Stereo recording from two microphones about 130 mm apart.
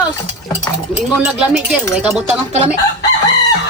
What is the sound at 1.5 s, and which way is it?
Speech, 5° right (ahead or behind).